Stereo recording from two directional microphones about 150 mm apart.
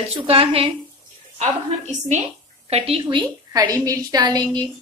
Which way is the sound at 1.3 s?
50° right (ahead or behind).